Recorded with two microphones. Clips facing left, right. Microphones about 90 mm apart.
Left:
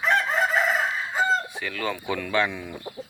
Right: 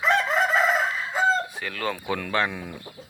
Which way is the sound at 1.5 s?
40° right (ahead or behind).